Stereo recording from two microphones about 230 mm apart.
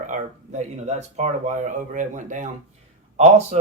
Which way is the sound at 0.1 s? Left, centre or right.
Right.